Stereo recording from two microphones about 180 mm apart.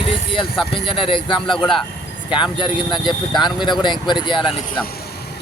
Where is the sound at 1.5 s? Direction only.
Centre (ahead or behind).